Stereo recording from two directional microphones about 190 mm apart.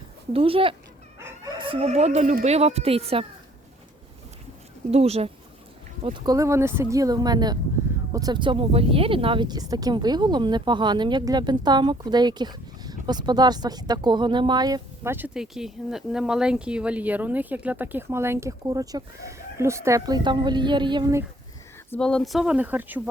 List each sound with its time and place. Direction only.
0.3 s speech: 30° right (ahead or behind)
4.9 s speech: 35° right (ahead or behind)
6.1 s speech: 25° right (ahead or behind)
21.8 s speech: 5° left (ahead or behind)